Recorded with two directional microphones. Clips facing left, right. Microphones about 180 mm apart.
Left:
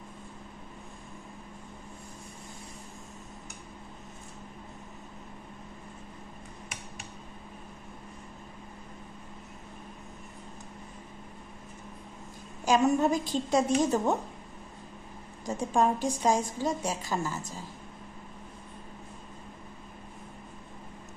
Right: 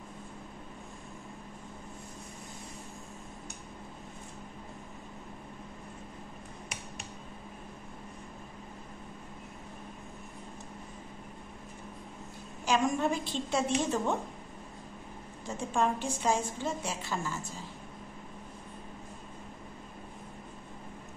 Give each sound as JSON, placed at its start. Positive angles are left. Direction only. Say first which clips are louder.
{"t": 12.6, "sound": "a woman's voice", "louder": "left 4 dB", "side_deg": 40}
{"t": 15.4, "sound": "a woman's voice", "louder": "left 4 dB", "side_deg": 40}